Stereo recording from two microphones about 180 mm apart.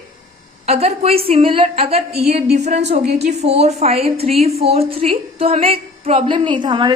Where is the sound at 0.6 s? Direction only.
35° right (ahead or behind).